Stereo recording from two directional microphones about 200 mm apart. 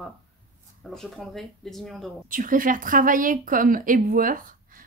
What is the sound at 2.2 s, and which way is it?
A woman's voice, 40° right (ahead or behind).